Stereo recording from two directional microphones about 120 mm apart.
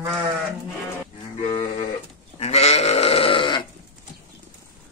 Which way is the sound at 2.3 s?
60° left (ahead or behind).